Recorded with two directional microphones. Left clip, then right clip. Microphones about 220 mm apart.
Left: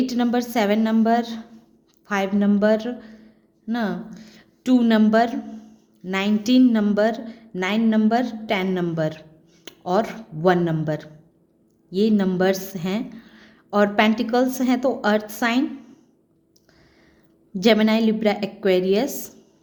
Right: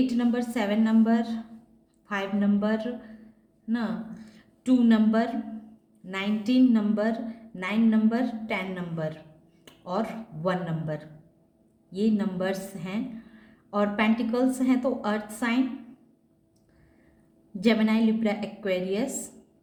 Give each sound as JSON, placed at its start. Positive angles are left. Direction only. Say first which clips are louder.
{"t": 0.0, "sound": "a woman's voice", "louder": "left 4 dB", "side_deg": 50}
{"t": 17.6, "sound": "a woman's voice", "louder": "left 7 dB", "side_deg": 50}